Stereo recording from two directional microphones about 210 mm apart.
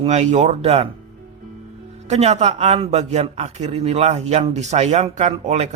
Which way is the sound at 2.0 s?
30° right (ahead or behind).